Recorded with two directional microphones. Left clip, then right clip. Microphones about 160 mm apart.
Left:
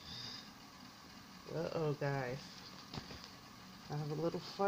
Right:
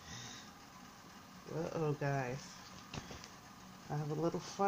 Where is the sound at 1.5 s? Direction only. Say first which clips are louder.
Even; 40° right (ahead or behind).